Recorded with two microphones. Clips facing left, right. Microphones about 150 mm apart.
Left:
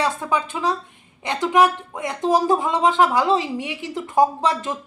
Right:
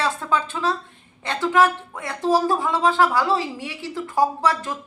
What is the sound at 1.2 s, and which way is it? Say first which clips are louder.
Speech: left 1 dB; 15° left (ahead or behind).